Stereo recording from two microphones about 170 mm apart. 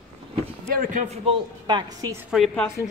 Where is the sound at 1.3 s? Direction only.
25° right (ahead or behind).